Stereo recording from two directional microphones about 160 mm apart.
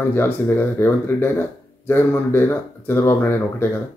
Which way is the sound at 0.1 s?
15° left (ahead or behind).